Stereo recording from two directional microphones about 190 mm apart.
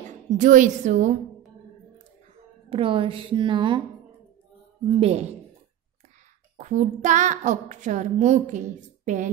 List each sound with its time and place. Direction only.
0.4 s a woman's voice: 40° right (ahead or behind)
2.7 s a woman's voice: 30° right (ahead or behind)
4.8 s a woman's voice: 30° right (ahead or behind)
6.5 s a woman's voice: 40° right (ahead or behind)